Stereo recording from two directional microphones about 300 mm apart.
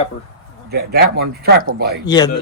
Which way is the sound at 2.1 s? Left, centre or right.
Centre.